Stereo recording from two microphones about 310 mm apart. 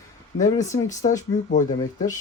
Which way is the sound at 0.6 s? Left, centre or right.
Centre.